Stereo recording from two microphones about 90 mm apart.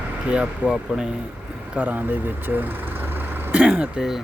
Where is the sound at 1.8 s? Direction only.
20° right (ahead or behind).